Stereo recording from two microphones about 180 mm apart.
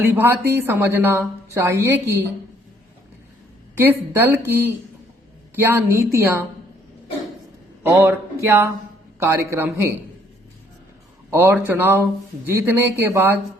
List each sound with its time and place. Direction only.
0.0 s a woman's voice: 10° right (ahead or behind)
3.8 s a woman's voice: 10° right (ahead or behind)
7.9 s a woman's voice: 15° right (ahead or behind)
11.3 s a woman's voice: 15° right (ahead or behind)